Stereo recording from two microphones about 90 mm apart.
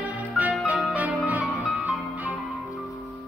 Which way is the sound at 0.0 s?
15° right (ahead or behind).